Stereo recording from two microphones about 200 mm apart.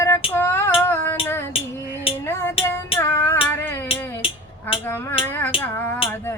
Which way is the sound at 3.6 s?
10° left (ahead or behind).